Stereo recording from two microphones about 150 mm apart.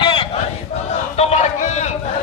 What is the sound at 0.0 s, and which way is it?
Battle cry, 35° left (ahead or behind).